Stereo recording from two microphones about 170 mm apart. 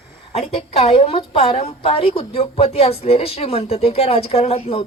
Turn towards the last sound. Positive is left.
turn(degrees=35)  # may be behind; listen again after turning